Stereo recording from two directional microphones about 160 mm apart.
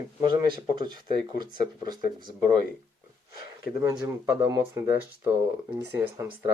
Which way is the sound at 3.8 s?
15° right (ahead or behind).